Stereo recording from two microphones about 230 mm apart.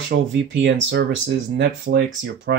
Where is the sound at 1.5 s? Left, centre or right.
Right.